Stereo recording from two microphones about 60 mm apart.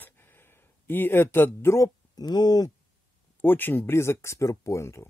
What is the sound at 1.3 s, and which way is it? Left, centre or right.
Speech, left.